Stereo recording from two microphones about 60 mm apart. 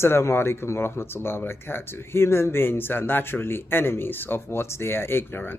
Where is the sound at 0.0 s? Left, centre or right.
Left.